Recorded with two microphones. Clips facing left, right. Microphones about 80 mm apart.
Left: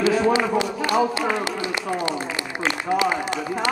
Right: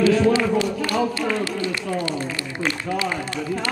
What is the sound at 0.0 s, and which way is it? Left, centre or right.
Speech, left.